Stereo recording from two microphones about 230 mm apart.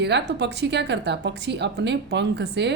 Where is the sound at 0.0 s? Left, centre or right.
Right.